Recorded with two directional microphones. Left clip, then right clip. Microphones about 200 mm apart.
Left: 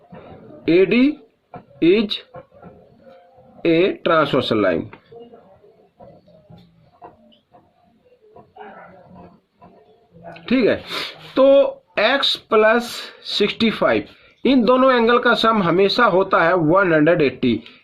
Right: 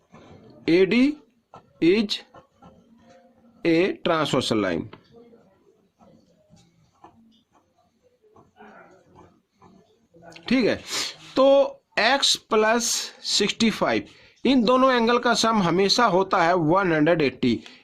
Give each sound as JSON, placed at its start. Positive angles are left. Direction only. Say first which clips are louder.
{"t": 0.6, "sound": "speech", "louder": "left 4 dB", "side_deg": -40}
{"t": 3.6, "sound": "speech", "louder": "left 5 dB", "side_deg": -40}
{"t": 10.2, "sound": "speech", "louder": "left 5 dB", "side_deg": -40}